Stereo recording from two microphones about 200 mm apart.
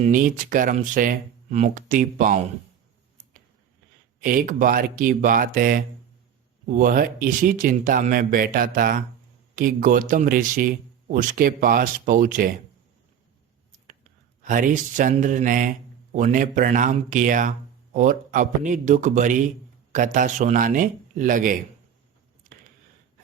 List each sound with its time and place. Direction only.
0.0 s speech: 40° right (ahead or behind)
4.2 s speech: 45° right (ahead or behind)
14.4 s speech: 40° right (ahead or behind)